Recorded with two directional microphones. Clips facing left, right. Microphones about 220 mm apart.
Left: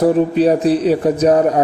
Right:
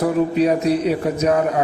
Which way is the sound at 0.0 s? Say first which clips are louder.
Left 4 dB; 30° left (ahead or behind).